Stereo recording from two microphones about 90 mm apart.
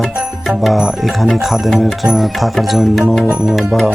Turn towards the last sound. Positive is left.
turn(degrees=0)  # may be behind; listen again after turning